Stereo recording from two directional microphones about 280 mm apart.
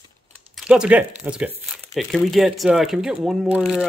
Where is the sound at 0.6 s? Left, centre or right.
Centre.